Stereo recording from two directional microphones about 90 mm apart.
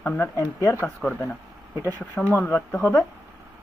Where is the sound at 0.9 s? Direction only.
15° left (ahead or behind).